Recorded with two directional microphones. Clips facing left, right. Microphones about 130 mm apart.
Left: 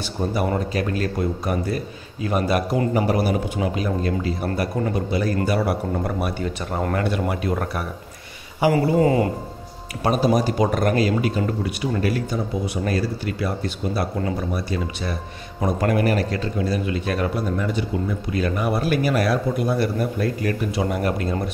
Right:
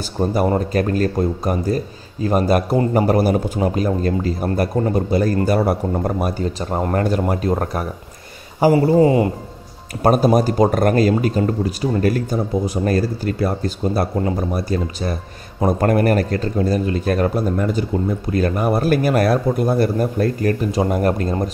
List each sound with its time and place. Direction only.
0.3 s a man's voice: 45° right (ahead or behind)
9.0 s speech: 25° right (ahead or behind)
10.0 s a man's voice: 45° right (ahead or behind)